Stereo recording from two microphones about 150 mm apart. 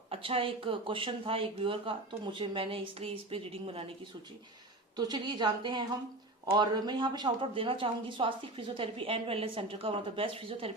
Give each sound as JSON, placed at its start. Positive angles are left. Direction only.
{"t": 0.1, "sound": "speech", "side_deg": -35}
{"t": 4.9, "sound": "a woman's voice", "side_deg": -30}